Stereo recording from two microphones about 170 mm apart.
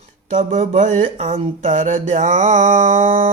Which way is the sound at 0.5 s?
50° right (ahead or behind).